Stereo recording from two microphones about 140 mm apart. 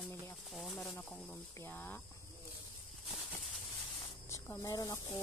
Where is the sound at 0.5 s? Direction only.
Centre (ahead or behind).